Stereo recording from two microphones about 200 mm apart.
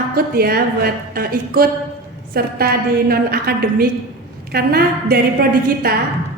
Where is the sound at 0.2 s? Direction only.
50° right (ahead or behind).